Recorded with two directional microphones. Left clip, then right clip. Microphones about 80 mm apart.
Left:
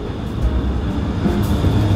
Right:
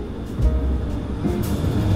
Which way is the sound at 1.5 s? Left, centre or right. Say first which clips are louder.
Left 5 dB; centre.